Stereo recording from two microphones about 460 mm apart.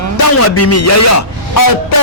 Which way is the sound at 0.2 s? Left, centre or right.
Left.